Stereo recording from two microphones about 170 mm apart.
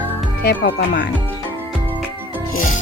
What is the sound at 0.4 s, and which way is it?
Speech, 65° left (ahead or behind).